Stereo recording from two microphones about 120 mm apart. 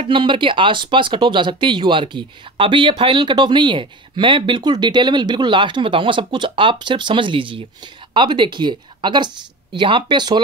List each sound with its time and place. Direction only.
0.0 s a woman's voice: 45° right (ahead or behind)